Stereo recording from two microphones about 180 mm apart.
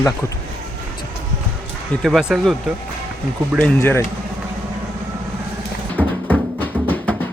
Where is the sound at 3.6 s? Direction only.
10° left (ahead or behind).